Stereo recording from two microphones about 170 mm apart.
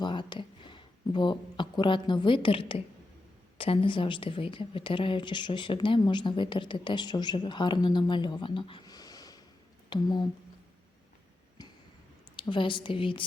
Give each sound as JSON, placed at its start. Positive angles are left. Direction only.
{"t": 0.0, "sound": "a sound", "side_deg": 25}
{"t": 3.6, "sound": "a woman's voice", "side_deg": 30}
{"t": 12.4, "sound": "a woman's voice", "side_deg": 30}